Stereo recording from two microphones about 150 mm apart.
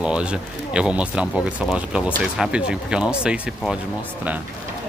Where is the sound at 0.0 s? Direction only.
5° right (ahead or behind).